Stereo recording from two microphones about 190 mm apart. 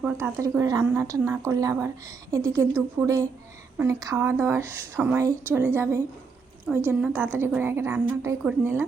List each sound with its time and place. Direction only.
0.0 s a woman's voice: 10° right (ahead or behind)